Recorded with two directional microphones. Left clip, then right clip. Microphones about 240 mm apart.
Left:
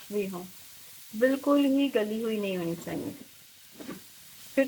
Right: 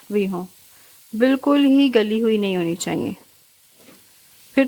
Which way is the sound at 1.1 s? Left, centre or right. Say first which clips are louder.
Right 7 dB; right.